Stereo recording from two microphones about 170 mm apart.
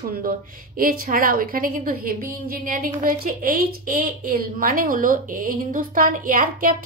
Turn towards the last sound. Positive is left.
turn(degrees=-55)  # may be behind; listen again after turning